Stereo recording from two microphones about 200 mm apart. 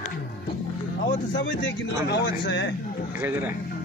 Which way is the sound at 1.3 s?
65° left (ahead or behind).